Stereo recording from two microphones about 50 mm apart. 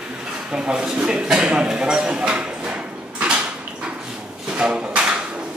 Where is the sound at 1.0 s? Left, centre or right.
Centre.